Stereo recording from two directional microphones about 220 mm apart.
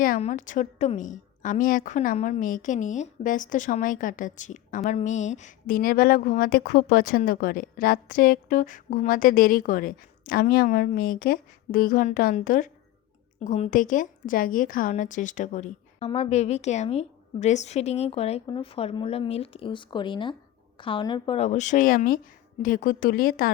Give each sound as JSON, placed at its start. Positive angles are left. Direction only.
{"t": 0.0, "sound": "a woman's voice", "side_deg": 35}